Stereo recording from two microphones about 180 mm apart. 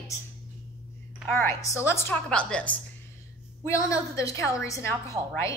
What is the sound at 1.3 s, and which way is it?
A woman's voice, 15° left (ahead or behind).